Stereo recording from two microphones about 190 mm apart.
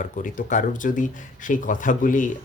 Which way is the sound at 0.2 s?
45° left (ahead or behind).